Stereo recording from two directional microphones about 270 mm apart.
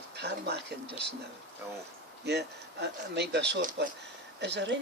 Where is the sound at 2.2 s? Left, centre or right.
Right.